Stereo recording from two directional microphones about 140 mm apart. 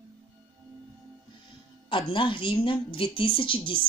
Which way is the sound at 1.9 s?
35° left (ahead or behind).